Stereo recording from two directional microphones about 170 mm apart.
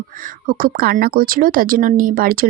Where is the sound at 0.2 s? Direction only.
55° right (ahead or behind).